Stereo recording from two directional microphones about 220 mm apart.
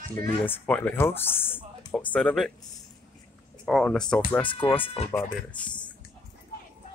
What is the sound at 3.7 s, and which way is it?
Speech, centre (ahead or behind).